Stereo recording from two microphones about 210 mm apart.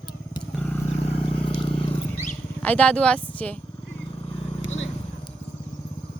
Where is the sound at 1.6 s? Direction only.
25° left (ahead or behind).